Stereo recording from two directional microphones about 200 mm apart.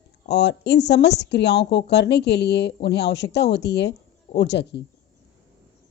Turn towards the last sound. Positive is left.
turn(degrees=60)  # may be behind; listen again after turning